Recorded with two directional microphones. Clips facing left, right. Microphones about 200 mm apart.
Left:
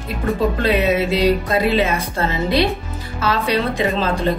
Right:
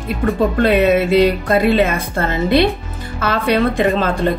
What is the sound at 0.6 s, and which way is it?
Speech, 55° right (ahead or behind).